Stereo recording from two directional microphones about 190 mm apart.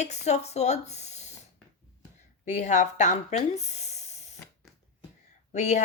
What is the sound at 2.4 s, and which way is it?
Speech, 40° left (ahead or behind).